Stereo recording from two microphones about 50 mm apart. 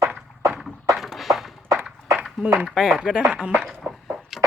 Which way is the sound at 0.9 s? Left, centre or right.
Centre.